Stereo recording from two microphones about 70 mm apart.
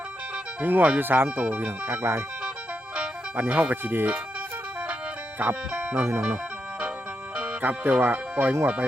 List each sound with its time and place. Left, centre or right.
0.6 s speech: right
3.3 s speech: right
5.4 s speech: right
7.3 s speech: right